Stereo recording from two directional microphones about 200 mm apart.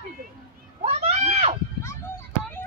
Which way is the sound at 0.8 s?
30° right (ahead or behind).